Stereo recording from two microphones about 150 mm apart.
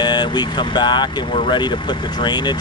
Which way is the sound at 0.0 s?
30° left (ahead or behind).